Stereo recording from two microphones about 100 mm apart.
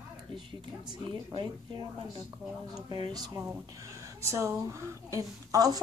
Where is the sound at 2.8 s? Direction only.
45° right (ahead or behind).